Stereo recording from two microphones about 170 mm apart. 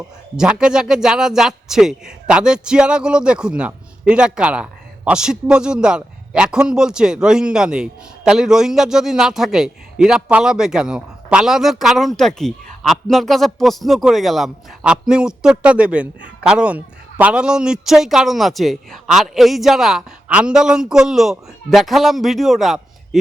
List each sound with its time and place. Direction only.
0.3 s a man's voice: 5° right (ahead or behind)